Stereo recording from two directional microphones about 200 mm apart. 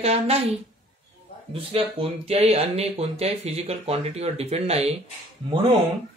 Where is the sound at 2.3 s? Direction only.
30° right (ahead or behind).